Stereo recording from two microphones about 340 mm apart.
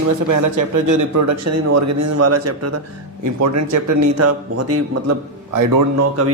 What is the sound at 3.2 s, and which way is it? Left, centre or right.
Speech, right.